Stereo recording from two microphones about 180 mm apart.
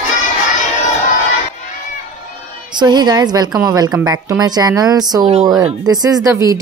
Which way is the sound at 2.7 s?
25° right (ahead or behind).